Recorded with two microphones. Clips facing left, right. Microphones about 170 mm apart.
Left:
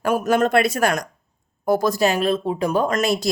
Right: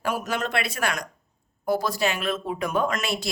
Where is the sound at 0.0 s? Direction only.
50° left (ahead or behind).